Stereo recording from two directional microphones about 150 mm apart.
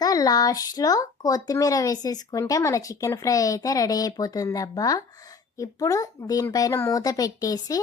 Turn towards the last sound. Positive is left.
turn(degrees=25)  # may be behind; listen again after turning